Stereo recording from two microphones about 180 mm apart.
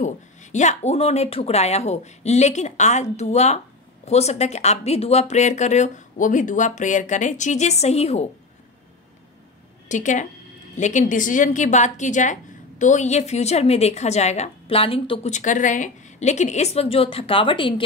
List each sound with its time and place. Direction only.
0.0 s speech: 40° left (ahead or behind)
9.8 s a woman's voice: 45° left (ahead or behind); by 17.8 s 30° left (ahead or behind)